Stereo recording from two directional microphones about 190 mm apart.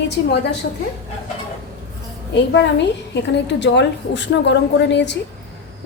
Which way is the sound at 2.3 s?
70° left (ahead or behind).